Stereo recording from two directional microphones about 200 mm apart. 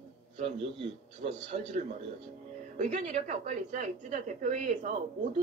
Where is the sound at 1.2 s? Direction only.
30° right (ahead or behind).